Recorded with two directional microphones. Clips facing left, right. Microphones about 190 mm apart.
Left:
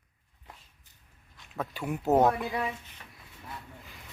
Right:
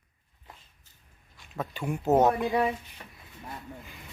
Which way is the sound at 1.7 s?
5° left (ahead or behind).